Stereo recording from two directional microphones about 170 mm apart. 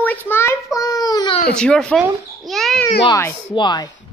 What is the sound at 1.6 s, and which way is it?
A woman's voice, 5° left (ahead or behind).